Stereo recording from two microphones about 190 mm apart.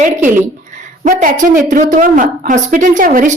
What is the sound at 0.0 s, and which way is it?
A woman's voice, 45° right (ahead or behind).